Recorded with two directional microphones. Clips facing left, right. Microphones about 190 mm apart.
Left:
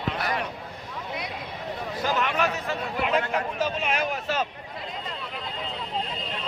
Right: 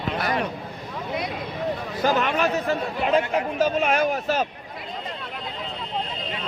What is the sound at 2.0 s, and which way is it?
Speech, 35° right (ahead or behind).